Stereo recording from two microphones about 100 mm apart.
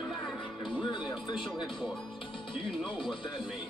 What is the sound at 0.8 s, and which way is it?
Music, 50° left (ahead or behind).